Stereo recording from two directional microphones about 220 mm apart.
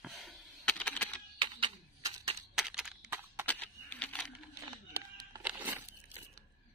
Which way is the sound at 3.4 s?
10° left (ahead or behind).